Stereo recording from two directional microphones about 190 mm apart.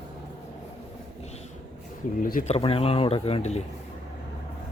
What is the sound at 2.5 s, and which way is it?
Speech, 30° left (ahead or behind).